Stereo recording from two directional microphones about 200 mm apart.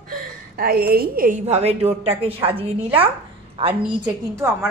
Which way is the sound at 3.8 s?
10° right (ahead or behind).